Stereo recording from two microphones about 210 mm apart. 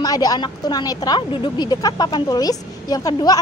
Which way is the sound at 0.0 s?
15° left (ahead or behind).